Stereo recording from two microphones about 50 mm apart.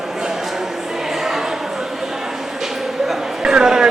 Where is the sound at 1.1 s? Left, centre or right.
Centre.